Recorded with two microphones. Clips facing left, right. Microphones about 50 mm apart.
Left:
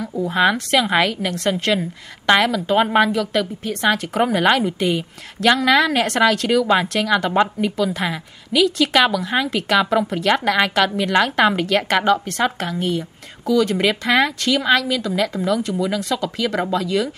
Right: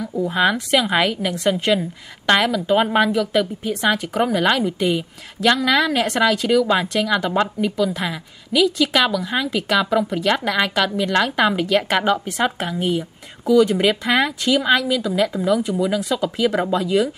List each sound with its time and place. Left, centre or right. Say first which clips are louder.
0.1 s a woman's voice: left 1 dB; centre
4.7 s a woman's voice: even; centre
7.2 s speech: left 2 dB; centre
7.7 s a woman's voice: even; centre
11.7 s a woman's voice: left 1 dB; centre; by 17.1 s right